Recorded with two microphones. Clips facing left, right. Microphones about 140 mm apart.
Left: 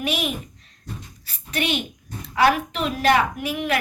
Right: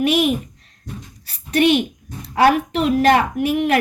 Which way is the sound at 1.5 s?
55° right (ahead or behind).